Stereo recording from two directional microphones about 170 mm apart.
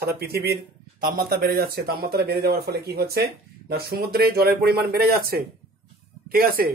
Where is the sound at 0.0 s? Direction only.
70° right (ahead or behind).